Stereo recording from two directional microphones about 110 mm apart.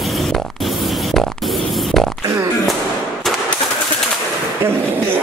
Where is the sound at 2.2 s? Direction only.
30° right (ahead or behind).